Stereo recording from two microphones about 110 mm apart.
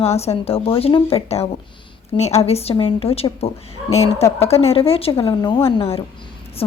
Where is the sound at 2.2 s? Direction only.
75° left (ahead or behind).